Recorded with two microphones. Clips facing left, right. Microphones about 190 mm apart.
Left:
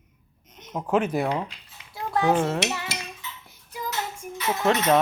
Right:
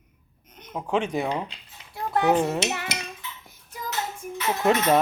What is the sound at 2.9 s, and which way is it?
Dishes, 20° right (ahead or behind).